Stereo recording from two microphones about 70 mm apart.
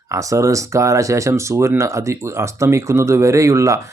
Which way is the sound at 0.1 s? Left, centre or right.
Right.